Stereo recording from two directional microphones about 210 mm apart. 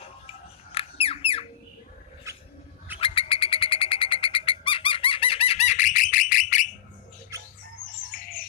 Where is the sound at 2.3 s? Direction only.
15° right (ahead or behind).